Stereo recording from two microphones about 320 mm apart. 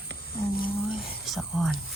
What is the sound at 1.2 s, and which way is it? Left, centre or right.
Whispering, centre.